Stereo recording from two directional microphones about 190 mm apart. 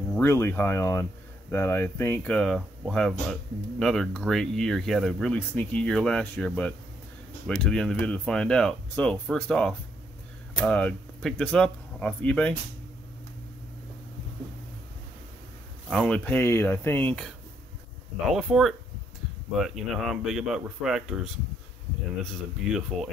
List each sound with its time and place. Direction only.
0.1 s speech: 15° left (ahead or behind)
15.9 s speech: 5° left (ahead or behind)
18.3 s speech: centre (ahead or behind)